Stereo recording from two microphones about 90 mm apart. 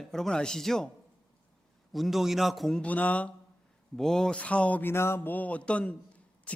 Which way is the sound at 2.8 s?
15° left (ahead or behind).